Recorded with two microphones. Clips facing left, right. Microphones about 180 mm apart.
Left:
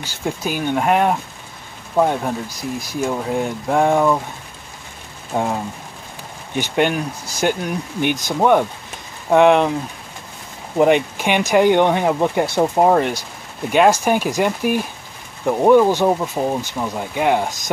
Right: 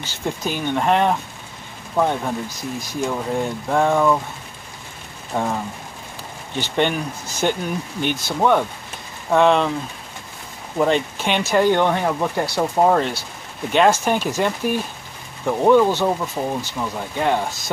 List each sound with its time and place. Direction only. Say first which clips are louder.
0.0 s speech: left 1 dB; 10° left (ahead or behind)
5.3 s speech: left 2 dB; 15° left (ahead or behind)
6.5 s speech: left 2 dB; 10° left (ahead or behind)
10.8 s speech: left 4 dB; 15° left (ahead or behind)